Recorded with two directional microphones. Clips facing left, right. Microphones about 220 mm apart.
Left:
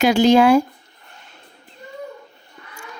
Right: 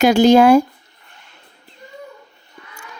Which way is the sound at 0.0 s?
45° right (ahead or behind).